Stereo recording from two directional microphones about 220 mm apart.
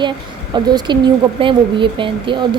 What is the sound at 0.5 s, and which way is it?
Speech, 20° right (ahead or behind).